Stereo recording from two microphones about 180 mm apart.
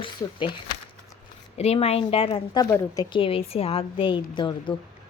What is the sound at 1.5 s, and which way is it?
A woman's voice, 35° left (ahead or behind).